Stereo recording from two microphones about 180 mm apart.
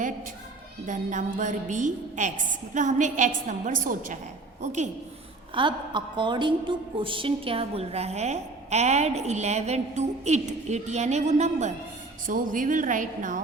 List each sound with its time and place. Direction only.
0.9 s a woman's voice: 45° right (ahead or behind)
5.5 s a woman's voice: 25° right (ahead or behind); by 13.4 s 45° right (ahead or behind)